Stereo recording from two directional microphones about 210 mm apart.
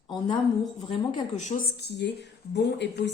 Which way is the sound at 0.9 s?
35° left (ahead or behind).